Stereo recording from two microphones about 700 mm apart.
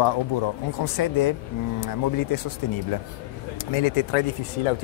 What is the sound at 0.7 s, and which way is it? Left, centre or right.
Speech, left.